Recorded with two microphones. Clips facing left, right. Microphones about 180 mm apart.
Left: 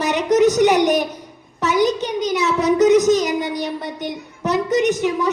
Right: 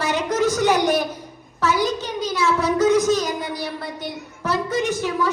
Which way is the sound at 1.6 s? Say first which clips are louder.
Left 4 dB; 20° left (ahead or behind).